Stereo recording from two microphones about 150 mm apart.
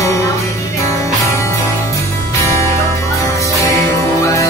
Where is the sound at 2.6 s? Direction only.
20° left (ahead or behind).